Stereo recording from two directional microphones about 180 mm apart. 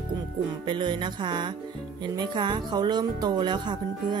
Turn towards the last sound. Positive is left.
turn(degrees=-25)  # may be behind; listen again after turning